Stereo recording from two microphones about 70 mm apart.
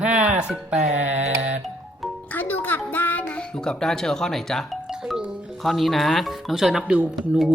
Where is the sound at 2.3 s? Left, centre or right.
Left.